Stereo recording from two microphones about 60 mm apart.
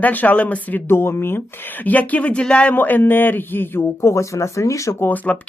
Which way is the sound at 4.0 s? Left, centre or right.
Left.